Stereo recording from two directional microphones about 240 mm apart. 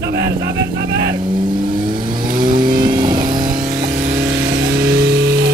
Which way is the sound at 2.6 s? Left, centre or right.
Centre.